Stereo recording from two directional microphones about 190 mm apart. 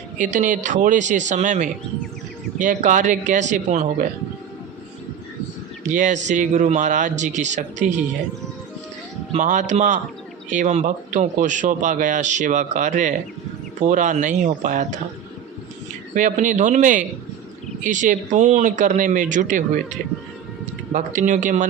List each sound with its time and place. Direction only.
0.2 s speech: 40° right (ahead or behind)
5.8 s speech: 40° right (ahead or behind)
9.3 s speech: 40° right (ahead or behind)
16.1 s speech: 40° right (ahead or behind)
20.9 s speech: 40° right (ahead or behind)